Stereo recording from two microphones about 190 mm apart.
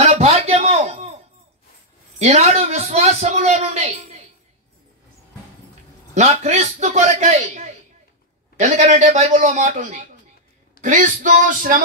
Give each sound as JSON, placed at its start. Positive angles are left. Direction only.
{"t": 0.0, "sound": "a sound", "side_deg": -35}
{"t": 2.1, "sound": "a man's voice", "side_deg": -35}
{"t": 6.1, "sound": "a man's voice", "side_deg": -35}